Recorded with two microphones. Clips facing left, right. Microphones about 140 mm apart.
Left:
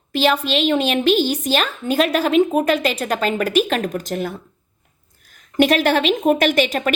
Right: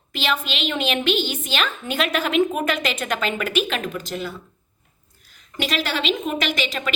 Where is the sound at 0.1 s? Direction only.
40° left (ahead or behind).